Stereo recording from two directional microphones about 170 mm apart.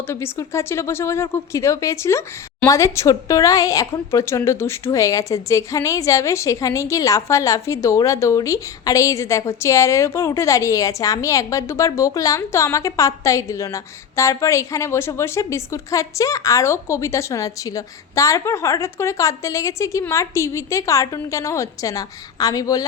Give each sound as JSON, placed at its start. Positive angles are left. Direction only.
{"t": 0.1, "sound": "speech", "side_deg": 15}